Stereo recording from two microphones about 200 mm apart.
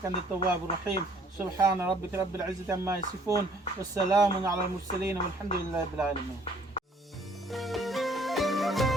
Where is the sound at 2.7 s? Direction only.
15° right (ahead or behind).